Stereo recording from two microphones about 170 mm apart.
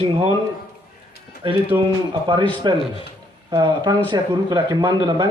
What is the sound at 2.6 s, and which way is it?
A man's voice, 25° right (ahead or behind).